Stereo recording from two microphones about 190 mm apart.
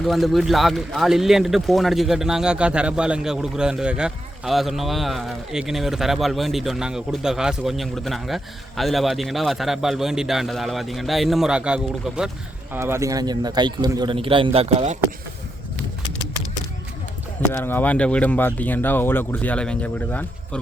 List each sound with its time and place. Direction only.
0.0 s speech: centre (ahead or behind)
12.7 s a man's voice: 15° right (ahead or behind); by 14.9 s 30° right (ahead or behind)
17.5 s speech: 10° left (ahead or behind)